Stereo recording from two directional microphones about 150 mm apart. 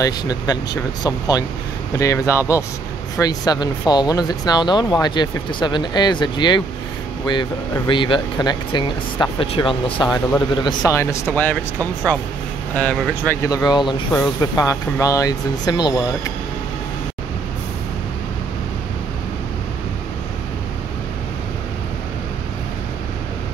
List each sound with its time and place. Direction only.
0.0 s speech: 25° left (ahead or behind)
10.9 s speech: 20° left (ahead or behind)
12.7 s speech: 10° left (ahead or behind)
13.5 s speech: 25° left (ahead or behind)